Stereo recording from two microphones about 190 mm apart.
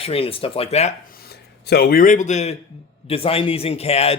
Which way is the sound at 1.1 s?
55° left (ahead or behind).